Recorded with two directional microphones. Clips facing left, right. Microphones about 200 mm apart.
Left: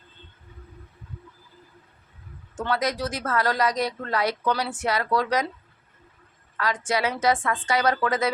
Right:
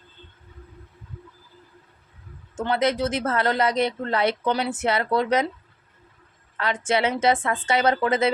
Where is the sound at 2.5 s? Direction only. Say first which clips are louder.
Right 4 dB; 25° right (ahead or behind).